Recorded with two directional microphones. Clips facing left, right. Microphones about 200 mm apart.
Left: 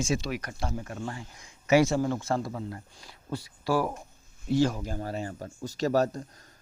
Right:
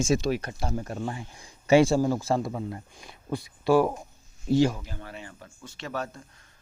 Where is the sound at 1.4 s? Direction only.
30° right (ahead or behind).